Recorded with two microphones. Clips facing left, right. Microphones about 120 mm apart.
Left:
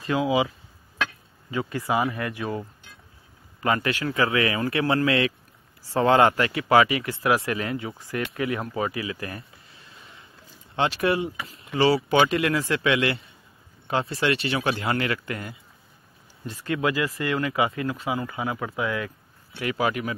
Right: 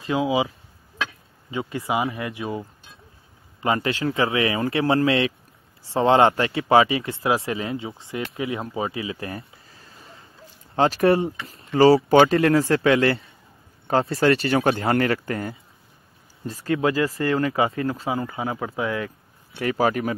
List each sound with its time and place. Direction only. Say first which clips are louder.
0.0 s speech: right 1 dB; 25° right (ahead or behind)
1.5 s speech: even; 25° right (ahead or behind)
3.6 s speech: right 2 dB; 25° right (ahead or behind)